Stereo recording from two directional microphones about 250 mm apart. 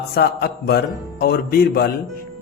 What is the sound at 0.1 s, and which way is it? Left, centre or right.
Speech, left.